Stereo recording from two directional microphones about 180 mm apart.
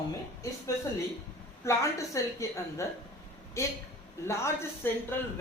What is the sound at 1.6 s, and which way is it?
Speech, 15° left (ahead or behind).